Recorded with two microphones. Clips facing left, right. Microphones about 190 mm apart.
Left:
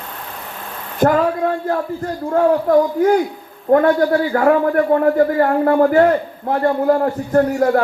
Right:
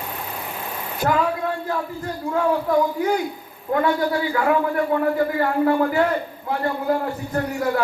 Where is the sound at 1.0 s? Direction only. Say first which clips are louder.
Left 7 dB; 50° left (ahead or behind).